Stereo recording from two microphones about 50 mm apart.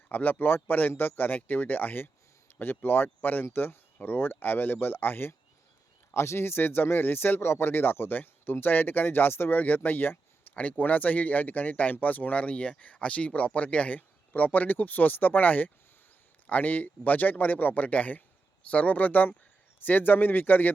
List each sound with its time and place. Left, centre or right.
0.1 s speech: left
3.2 s speech: left
3.4 s speech: left
6.1 s speech: left
10.5 s speech: left